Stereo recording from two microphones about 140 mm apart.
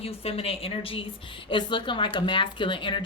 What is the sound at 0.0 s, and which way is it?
A woman's voice, 45° left (ahead or behind).